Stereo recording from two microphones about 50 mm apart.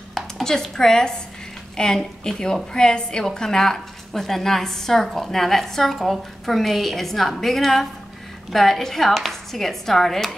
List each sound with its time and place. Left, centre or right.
0.1 s a woman's voice: centre